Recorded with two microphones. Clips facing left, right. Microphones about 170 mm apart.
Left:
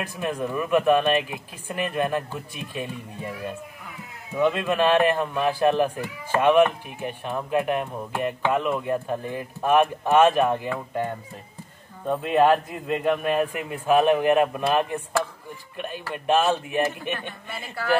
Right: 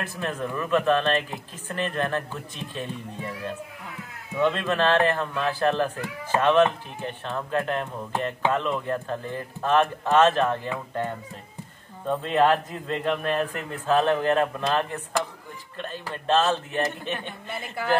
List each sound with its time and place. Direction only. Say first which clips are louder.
0.0 s speech: left 2 dB; 15° left (ahead or behind)
12.1 s speech: left 2 dB; 10° left (ahead or behind)
17.5 s speech: left 1 dB; 20° right (ahead or behind)